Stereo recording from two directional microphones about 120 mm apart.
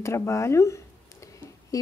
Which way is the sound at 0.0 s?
25° left (ahead or behind).